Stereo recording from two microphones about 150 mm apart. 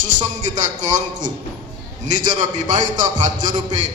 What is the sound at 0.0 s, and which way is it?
Music, 55° right (ahead or behind).